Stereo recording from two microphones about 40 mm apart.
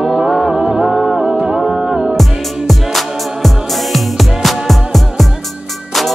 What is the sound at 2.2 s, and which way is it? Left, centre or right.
Music, centre.